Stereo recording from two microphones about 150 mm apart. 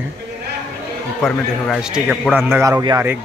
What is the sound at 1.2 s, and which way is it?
Speech, centre (ahead or behind).